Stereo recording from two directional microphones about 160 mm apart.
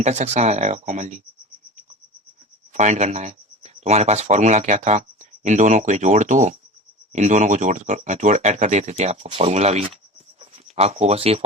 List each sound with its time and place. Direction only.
0.0 s speech: 45° right (ahead or behind)
2.7 s speech: 45° right (ahead or behind)